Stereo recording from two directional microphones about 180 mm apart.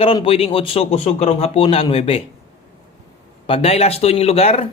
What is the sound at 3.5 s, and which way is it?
Speech, 35° left (ahead or behind).